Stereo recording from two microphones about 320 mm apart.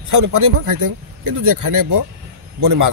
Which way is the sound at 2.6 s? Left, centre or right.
Right.